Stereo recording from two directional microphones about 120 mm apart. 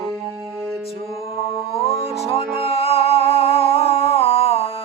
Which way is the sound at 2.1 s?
60° left (ahead or behind).